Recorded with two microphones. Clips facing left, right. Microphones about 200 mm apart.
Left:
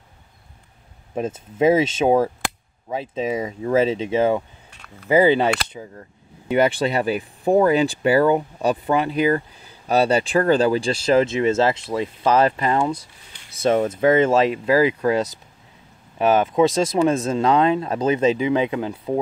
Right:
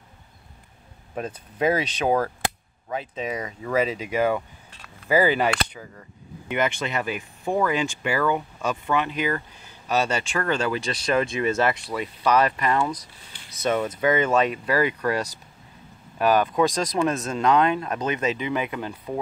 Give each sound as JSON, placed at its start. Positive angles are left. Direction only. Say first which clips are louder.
{"t": 1.3, "sound": "speech", "louder": "left 6 dB", "side_deg": 25}
{"t": 6.5, "sound": "speech", "louder": "left 7 dB", "side_deg": 35}